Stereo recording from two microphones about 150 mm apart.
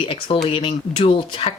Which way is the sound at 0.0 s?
35° left (ahead or behind).